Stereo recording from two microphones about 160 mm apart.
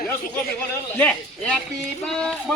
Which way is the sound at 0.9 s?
5° left (ahead or behind).